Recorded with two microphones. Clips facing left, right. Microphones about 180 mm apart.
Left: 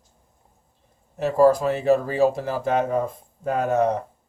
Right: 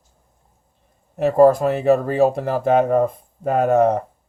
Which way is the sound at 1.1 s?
60° right (ahead or behind).